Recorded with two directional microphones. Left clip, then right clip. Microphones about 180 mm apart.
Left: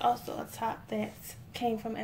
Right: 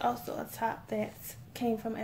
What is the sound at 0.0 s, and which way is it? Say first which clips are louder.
A woman's voice: left 3 dB; 30° right (ahead or behind).